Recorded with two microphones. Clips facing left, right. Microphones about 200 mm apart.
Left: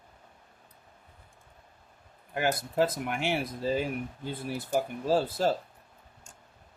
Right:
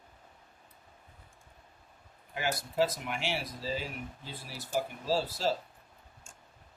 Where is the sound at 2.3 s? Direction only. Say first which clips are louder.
Left 4 dB; 50° left (ahead or behind).